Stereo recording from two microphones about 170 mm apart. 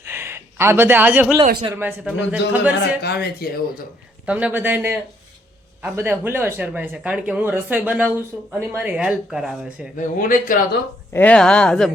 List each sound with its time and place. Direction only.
0.0 s a sound: 15° right (ahead or behind)
1.7 s speech: 10° right (ahead or behind)
3.0 s speech: 70° left (ahead or behind)
4.3 s speech: 10° right (ahead or behind)
10.0 s speech: 55° left (ahead or behind)
11.1 s speech: 10° left (ahead or behind)